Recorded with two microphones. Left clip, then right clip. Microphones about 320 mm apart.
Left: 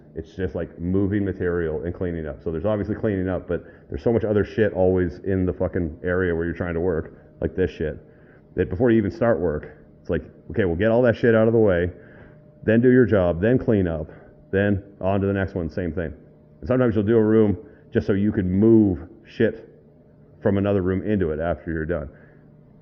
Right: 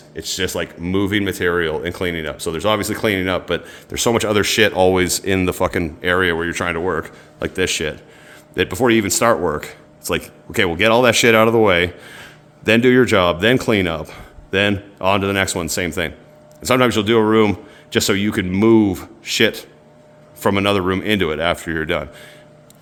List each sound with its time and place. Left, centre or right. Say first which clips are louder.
0.2 s speech: right 7 dB; right